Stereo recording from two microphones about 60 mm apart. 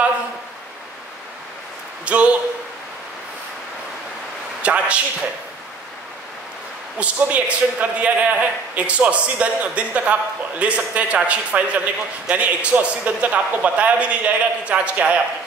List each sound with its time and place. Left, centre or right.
2.0 s a man's voice: right
4.6 s a man's voice: right
7.0 s a man's voice: right